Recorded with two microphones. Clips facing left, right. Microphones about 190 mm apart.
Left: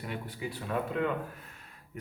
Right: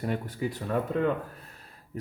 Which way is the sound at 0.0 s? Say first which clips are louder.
Right 7 dB; 45° right (ahead or behind).